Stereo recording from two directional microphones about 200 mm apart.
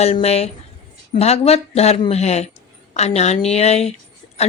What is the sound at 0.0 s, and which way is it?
A woman's voice, 30° left (ahead or behind).